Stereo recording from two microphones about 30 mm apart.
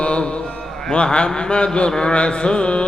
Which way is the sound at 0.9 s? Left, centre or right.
Left.